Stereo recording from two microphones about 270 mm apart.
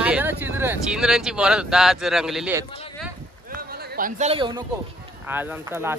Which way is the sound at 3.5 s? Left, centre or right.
Right.